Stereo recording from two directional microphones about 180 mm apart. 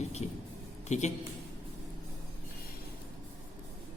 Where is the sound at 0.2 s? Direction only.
40° left (ahead or behind).